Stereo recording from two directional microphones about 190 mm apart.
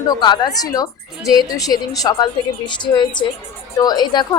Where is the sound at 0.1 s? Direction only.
20° left (ahead or behind).